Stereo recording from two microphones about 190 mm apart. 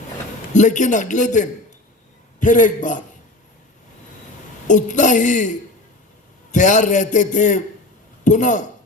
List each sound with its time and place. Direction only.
0.5 s a man's voice: 40° left (ahead or behind)
4.7 s a man's voice: 40° left (ahead or behind)
6.5 s a man's voice: 40° left (ahead or behind)